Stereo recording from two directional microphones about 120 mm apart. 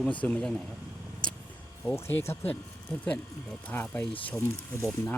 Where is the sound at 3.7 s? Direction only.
20° left (ahead or behind).